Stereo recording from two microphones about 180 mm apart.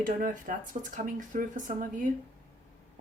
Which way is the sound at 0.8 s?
35° right (ahead or behind).